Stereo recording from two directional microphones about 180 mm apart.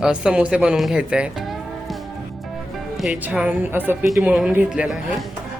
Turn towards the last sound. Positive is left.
turn(degrees=-5)  # may be behind; listen again after turning